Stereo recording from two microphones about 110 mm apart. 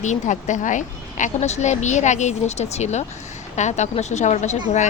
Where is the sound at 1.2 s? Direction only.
90° left.